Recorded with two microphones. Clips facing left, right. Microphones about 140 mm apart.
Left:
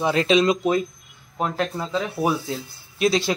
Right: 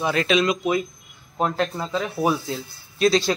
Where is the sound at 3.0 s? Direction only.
15° left (ahead or behind).